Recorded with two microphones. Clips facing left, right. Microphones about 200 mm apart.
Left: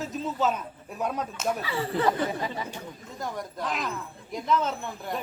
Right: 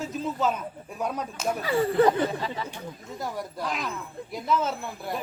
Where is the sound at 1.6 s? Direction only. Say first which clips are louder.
Right 6 dB; 45° right (ahead or behind).